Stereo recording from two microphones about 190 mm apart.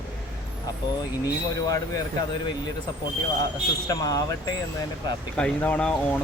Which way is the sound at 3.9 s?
20° left (ahead or behind).